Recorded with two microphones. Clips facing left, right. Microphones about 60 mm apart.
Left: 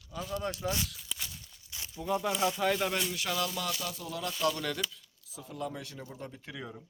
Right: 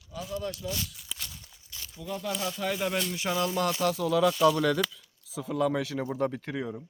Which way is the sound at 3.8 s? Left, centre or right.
Right.